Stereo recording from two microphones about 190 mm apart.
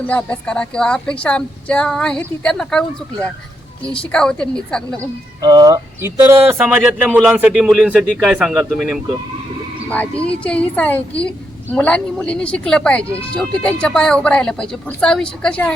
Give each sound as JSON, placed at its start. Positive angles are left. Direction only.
{"t": 0.1, "sound": "speech", "side_deg": 5}
{"t": 3.9, "sound": "speech", "side_deg": 5}
{"t": 4.9, "sound": "a woman's voice", "side_deg": -20}